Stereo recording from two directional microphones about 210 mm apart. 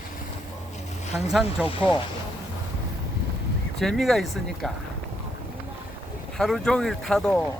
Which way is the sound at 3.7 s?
Centre (ahead or behind).